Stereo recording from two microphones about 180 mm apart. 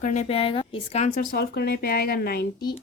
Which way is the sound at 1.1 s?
65° left (ahead or behind).